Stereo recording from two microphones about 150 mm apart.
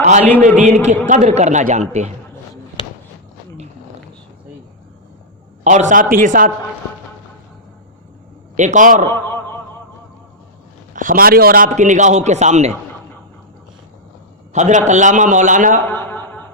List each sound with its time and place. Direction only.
0.0 s a man's voice: 50° right (ahead or behind)
5.6 s a man's voice: 55° right (ahead or behind)
8.5 s a man's voice: 55° right (ahead or behind)
9.1 s a man's voice: 15° left (ahead or behind)
10.9 s a man's voice: 65° right (ahead or behind); by 12.7 s 50° right (ahead or behind)
14.5 s a man's voice: 55° right (ahead or behind)
15.9 s a sound: 15° left (ahead or behind)